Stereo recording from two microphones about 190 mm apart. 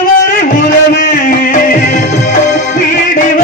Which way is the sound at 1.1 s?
45° left (ahead or behind).